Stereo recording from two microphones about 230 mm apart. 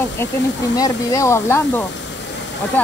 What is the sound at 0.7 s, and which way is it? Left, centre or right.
Speech, centre.